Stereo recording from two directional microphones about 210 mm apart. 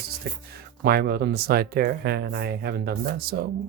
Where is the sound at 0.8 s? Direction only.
45° right (ahead or behind).